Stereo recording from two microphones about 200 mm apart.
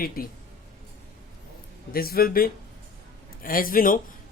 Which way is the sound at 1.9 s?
50° left (ahead or behind).